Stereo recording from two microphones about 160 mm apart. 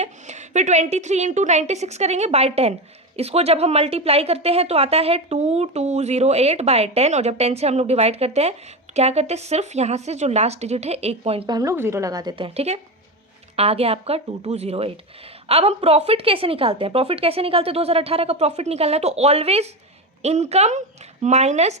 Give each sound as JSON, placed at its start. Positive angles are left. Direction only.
{"t": 0.0, "sound": "a woman's voice", "side_deg": -45}
{"t": 11.4, "sound": "speech", "side_deg": -20}
{"t": 12.5, "sound": "a woman's voice", "side_deg": -40}